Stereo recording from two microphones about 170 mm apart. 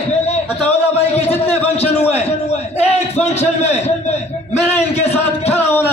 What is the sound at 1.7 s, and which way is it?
A man's voice, 35° left (ahead or behind).